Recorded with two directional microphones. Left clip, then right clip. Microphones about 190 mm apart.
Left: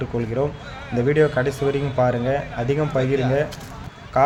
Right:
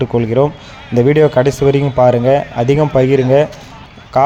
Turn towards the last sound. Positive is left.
turn(degrees=-40)  # may be behind; listen again after turning